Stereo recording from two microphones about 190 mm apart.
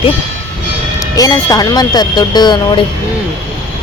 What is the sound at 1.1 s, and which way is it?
Speech, 20° left (ahead or behind).